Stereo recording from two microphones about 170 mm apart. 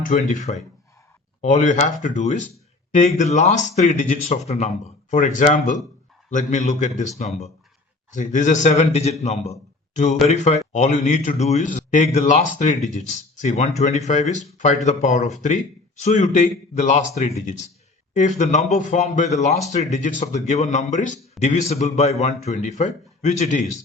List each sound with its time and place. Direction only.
0.0 s speech: 45° left (ahead or behind)
8.1 s speech: 45° left (ahead or behind)